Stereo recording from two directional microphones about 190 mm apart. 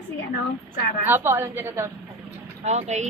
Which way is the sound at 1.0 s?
10° right (ahead or behind).